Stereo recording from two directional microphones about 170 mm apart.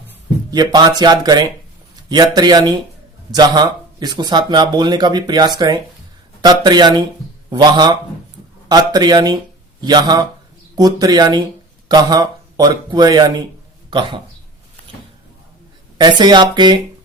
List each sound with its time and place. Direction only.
0.5 s speech: 25° right (ahead or behind)
16.0 s speech: 25° right (ahead or behind)